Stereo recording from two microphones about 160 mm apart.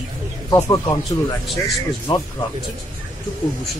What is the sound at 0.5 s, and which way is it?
Speech, 20° left (ahead or behind).